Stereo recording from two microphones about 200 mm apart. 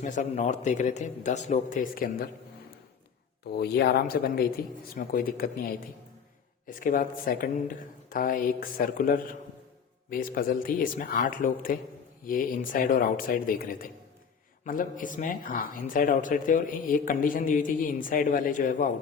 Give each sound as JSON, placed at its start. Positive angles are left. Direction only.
{"t": 0.0, "sound": "a man's voice", "side_deg": 35}
{"t": 3.4, "sound": "speech", "side_deg": 55}